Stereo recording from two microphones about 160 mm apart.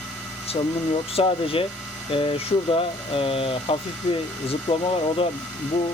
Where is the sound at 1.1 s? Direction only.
35° left (ahead or behind).